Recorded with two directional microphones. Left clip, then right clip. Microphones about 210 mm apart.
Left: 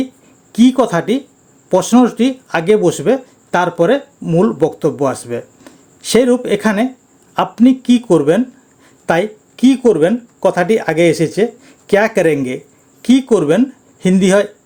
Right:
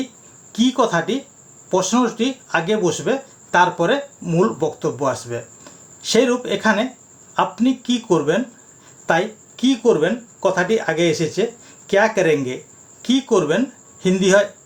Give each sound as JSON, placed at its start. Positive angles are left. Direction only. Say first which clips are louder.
{"t": 0.5, "sound": "speech", "louder": "left 5 dB", "side_deg": 50}